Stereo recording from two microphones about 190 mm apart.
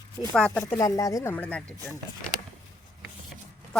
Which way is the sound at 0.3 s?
5° left (ahead or behind).